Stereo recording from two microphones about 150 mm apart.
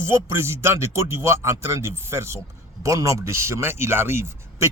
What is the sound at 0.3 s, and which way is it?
Speech, 15° right (ahead or behind).